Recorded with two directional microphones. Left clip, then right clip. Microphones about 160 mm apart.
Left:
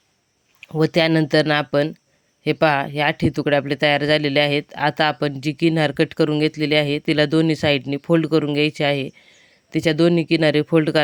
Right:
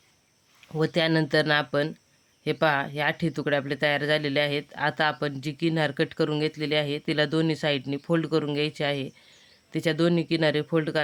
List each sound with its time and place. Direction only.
0.8 s speech: 40° left (ahead or behind)